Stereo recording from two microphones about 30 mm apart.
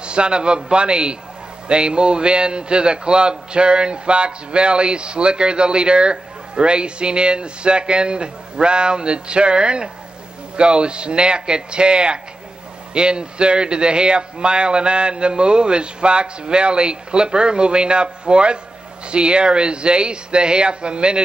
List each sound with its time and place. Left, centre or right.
0.0 s a man's voice: right